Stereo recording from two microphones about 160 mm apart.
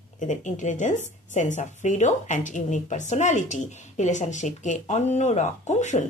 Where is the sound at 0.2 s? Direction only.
50° left (ahead or behind).